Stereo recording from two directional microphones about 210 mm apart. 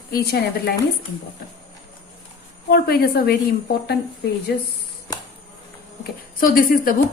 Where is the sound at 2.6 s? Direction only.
50° left (ahead or behind).